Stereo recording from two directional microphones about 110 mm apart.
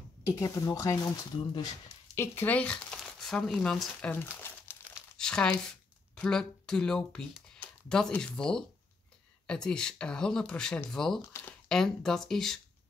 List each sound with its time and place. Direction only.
0.2 s speech: 30° left (ahead or behind)
2.1 s speech: 15° left (ahead or behind)
4.1 s crumpling: 20° left (ahead or behind)
5.1 s crumpling: 5° left (ahead or behind)
5.5 s speech: 10° left (ahead or behind)